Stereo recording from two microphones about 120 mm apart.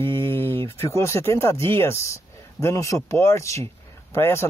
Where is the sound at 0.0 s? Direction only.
20° left (ahead or behind).